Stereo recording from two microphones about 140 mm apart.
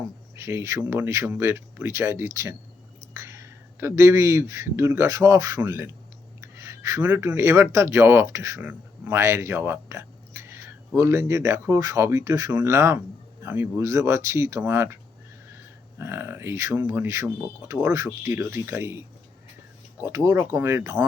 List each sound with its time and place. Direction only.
0.3 s speech: 20° right (ahead or behind)
16.0 s speech: 20° right (ahead or behind)